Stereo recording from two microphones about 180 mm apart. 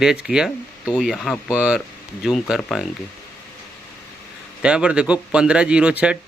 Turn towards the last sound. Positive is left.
turn(degrees=-5)  # may be behind; listen again after turning